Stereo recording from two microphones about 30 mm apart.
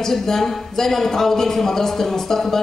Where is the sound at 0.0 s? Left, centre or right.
Centre.